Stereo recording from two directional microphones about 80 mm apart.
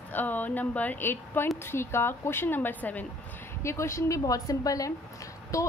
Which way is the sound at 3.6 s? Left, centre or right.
Left.